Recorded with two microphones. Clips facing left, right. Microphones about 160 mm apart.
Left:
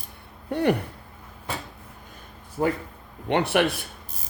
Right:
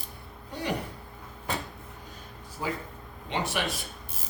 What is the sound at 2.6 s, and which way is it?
Speech, 60° left (ahead or behind).